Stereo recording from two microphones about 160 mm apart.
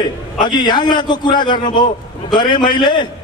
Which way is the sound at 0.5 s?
25° left (ahead or behind).